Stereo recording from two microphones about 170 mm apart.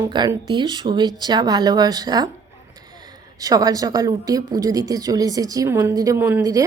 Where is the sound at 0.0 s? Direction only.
25° right (ahead or behind).